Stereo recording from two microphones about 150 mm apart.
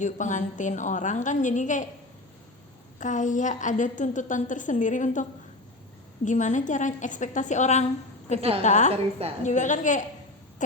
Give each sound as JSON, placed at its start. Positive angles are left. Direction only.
{"t": 0.0, "sound": "a woman's voice", "side_deg": 55}
{"t": 3.0, "sound": "a woman's voice", "side_deg": 55}
{"t": 6.2, "sound": "a woman's voice", "side_deg": 55}
{"t": 8.4, "sound": "a woman's voice", "side_deg": -40}
{"t": 8.6, "sound": "a woman's voice", "side_deg": 50}
{"t": 8.9, "sound": "a woman's voice", "side_deg": -40}
{"t": 9.4, "sound": "a woman's voice", "side_deg": 55}